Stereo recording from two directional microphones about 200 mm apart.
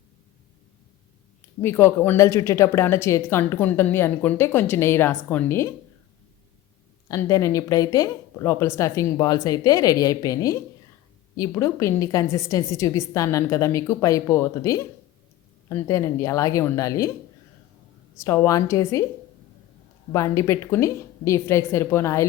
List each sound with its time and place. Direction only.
1.6 s speech: 10° left (ahead or behind)
7.1 s speech: 15° left (ahead or behind)
18.2 s speech: 15° left (ahead or behind)
20.1 s speech: 15° left (ahead or behind)